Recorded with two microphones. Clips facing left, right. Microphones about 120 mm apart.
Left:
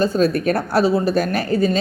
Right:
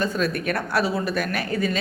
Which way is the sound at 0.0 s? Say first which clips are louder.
Left 7 dB; 35° left (ahead or behind).